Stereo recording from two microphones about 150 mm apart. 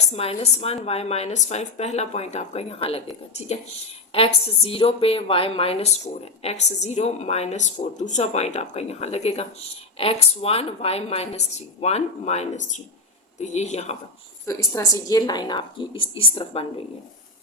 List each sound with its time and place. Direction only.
0.1 s a woman's voice: 40° left (ahead or behind)
4.1 s a woman's voice: 40° left (ahead or behind)
14.4 s a woman's voice: 20° left (ahead or behind); by 16.6 s 35° left (ahead or behind)